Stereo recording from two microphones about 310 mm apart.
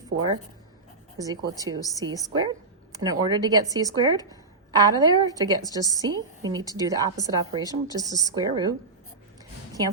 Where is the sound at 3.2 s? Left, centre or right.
Centre.